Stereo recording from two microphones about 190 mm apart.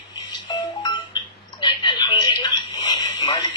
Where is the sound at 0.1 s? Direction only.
25° left (ahead or behind).